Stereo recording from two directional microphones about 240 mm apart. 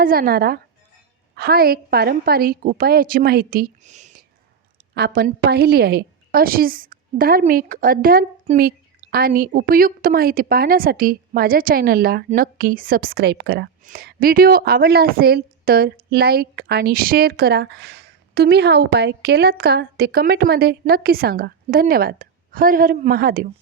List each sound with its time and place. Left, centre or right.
0.0 s a woman's voice: right
4.9 s a woman's voice: right